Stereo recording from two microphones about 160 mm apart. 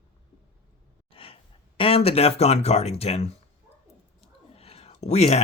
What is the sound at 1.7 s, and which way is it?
Speech, 35° left (ahead or behind).